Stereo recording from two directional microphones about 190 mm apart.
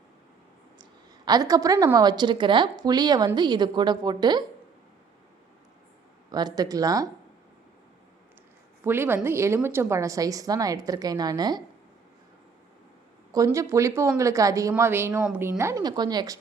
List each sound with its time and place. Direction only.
0.8 s a woman's voice: 20° right (ahead or behind)
6.3 s a woman's voice: 20° right (ahead or behind)
8.8 s a woman's voice: 10° right (ahead or behind)
13.3 s a woman's voice: 15° right (ahead or behind)